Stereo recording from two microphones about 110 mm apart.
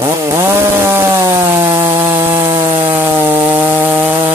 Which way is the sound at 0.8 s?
25° right (ahead or behind).